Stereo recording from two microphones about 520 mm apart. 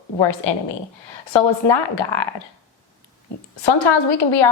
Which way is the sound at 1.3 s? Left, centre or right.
Left.